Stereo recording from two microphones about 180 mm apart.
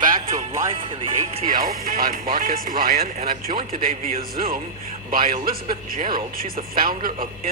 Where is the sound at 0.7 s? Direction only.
30° right (ahead or behind).